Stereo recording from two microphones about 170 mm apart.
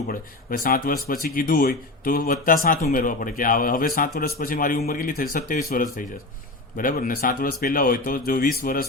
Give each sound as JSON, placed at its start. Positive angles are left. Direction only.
{"t": 0.1, "sound": "a man's voice", "side_deg": 60}
{"t": 6.7, "sound": "a man's voice", "side_deg": 55}